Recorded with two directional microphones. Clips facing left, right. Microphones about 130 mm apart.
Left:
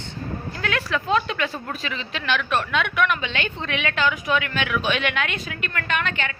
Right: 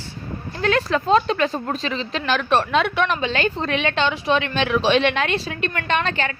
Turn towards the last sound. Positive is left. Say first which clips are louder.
# right 4 dB
turn(degrees=-35)  # may be behind; listen again after turning